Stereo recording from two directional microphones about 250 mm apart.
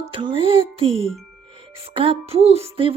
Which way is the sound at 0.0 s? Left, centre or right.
Centre.